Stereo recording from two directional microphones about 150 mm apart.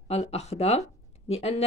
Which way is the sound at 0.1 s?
45° left (ahead or behind).